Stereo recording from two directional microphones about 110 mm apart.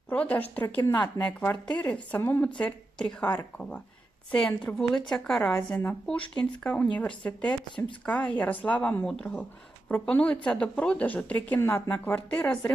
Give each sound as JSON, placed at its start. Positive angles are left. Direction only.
{"t": 0.1, "sound": "a woman's voice", "side_deg": 15}
{"t": 5.5, "sound": "speech", "side_deg": 20}